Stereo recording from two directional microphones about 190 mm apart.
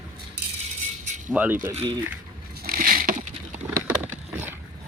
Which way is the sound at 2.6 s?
50° right (ahead or behind).